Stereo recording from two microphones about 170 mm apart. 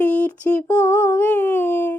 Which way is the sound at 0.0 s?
10° left (ahead or behind).